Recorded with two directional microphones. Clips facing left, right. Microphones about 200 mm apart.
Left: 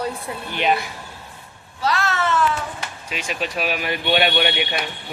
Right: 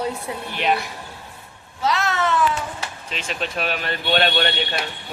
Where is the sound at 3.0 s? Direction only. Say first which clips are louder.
Left 2 dB; 10° left (ahead or behind).